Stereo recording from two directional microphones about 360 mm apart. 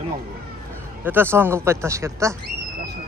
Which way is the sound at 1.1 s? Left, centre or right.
Centre.